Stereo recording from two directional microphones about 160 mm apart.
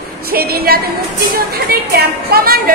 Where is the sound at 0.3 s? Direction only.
70° right (ahead or behind).